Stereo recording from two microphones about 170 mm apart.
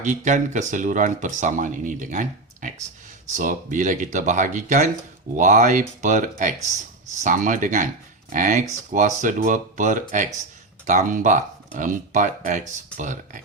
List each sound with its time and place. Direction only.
0.3 s speech: 45° right (ahead or behind)